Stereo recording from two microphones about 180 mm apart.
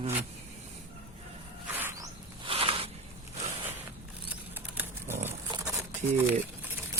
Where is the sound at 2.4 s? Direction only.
30° right (ahead or behind).